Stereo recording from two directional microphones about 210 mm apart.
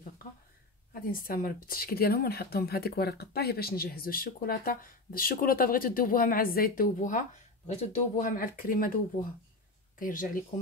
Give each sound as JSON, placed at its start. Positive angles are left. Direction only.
{"t": 0.9, "sound": "speech", "side_deg": 40}